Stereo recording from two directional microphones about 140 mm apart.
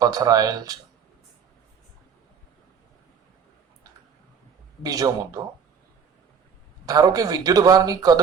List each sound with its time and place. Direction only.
0.0 s a man's voice: 25° right (ahead or behind)
4.8 s a man's voice: 25° right (ahead or behind)
6.8 s a man's voice: 25° right (ahead or behind)